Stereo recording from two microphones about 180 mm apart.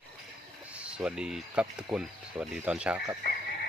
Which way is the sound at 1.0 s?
5° right (ahead or behind).